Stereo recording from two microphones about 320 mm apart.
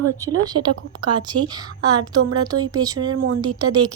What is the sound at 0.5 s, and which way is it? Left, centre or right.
Speech, right.